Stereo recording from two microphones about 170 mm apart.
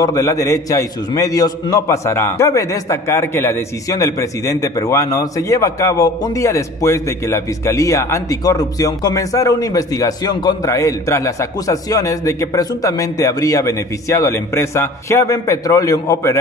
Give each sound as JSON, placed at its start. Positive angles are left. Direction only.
{"t": 0.0, "sound": "a man's voice", "side_deg": 20}